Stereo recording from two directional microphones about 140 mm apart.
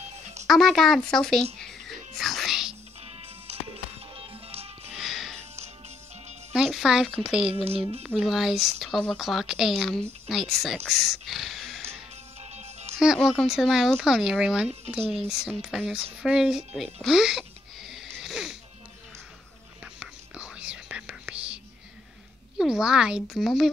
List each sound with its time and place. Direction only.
0.5 s speech: centre (ahead or behind)
1.6 s music: centre (ahead or behind)
3.1 s music: 45° right (ahead or behind)
4.9 s music: centre (ahead or behind)
6.5 s speech: centre (ahead or behind)
7.5 s speech: 45° right (ahead or behind)
8.0 s speech: centre (ahead or behind)
11.8 s music: 50° right (ahead or behind)
13.0 s speech: centre (ahead or behind)
19.8 s whispering: 10° right (ahead or behind)
22.6 s speech: 5° right (ahead or behind)